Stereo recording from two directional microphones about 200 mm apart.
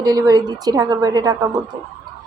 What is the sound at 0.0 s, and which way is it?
Speech, 20° right (ahead or behind).